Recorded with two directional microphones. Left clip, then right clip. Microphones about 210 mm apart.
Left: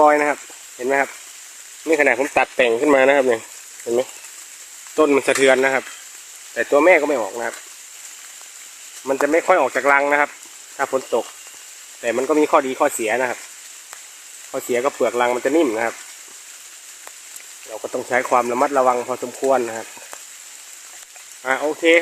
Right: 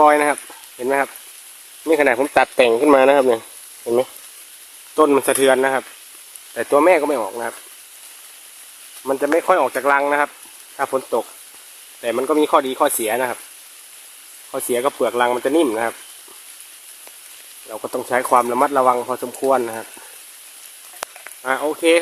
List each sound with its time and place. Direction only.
0.0 s speech: 10° right (ahead or behind)
4.9 s speech: 10° right (ahead or behind)
9.0 s speech: 5° right (ahead or behind)
14.5 s speech: 5° right (ahead or behind)
17.7 s speech: 10° right (ahead or behind)
21.4 s speech: 5° right (ahead or behind)